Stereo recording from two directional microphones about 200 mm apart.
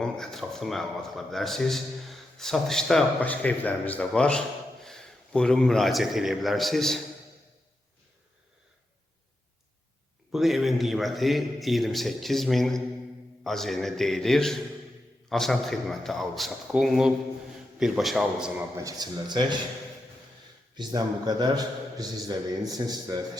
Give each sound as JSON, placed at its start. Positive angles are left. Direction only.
{"t": 0.0, "sound": "a man's voice", "side_deg": 0}
{"t": 10.3, "sound": "a man's voice", "side_deg": 0}
{"t": 18.8, "sound": "a man's voice", "side_deg": -20}
{"t": 20.7, "sound": "a man's voice", "side_deg": -20}